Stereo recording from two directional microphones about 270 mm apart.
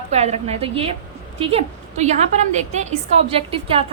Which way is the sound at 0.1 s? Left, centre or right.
Right.